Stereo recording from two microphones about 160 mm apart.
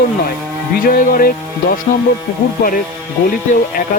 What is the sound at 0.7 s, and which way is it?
Speech, 60° left (ahead or behind).